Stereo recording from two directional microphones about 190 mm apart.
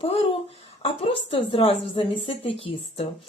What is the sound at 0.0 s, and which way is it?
A woman's voice, 30° left (ahead or behind).